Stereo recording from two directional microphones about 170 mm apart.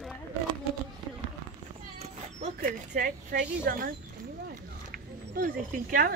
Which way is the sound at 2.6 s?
55° right (ahead or behind).